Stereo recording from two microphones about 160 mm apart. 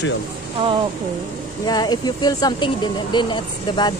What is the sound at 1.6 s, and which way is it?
Speech, 25° left (ahead or behind).